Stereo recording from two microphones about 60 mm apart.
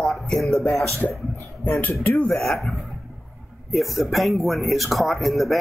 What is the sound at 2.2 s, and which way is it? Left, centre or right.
Speech, centre.